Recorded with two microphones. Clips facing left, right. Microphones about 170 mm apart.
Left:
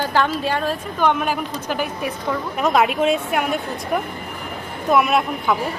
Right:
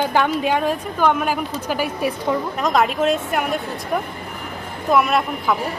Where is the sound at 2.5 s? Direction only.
5° left (ahead or behind).